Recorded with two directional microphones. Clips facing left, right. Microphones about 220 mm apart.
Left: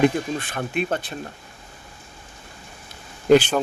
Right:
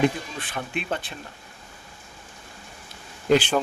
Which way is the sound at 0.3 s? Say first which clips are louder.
Left 5 dB; 45° left (ahead or behind).